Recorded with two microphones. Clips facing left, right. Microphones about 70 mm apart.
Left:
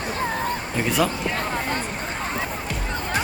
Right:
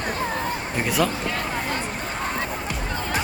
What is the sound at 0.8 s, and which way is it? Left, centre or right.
Speech, centre.